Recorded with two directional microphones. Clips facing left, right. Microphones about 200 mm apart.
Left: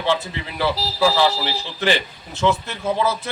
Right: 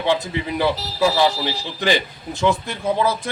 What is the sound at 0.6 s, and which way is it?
A man's voice, 15° right (ahead or behind).